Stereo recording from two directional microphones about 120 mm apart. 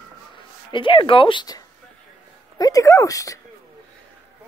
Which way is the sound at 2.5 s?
30° left (ahead or behind).